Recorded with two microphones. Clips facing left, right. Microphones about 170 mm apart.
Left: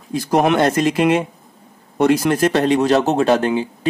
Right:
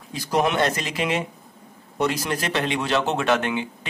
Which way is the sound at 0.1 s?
50° left (ahead or behind).